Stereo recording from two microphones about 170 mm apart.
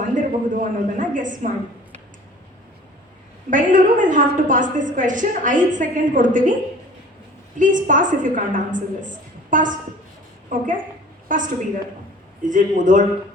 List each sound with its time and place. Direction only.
0.0 s a woman's voice: 50° right (ahead or behind)
3.5 s a woman's voice: 50° right (ahead or behind)
7.6 s a woman's voice: 50° right (ahead or behind)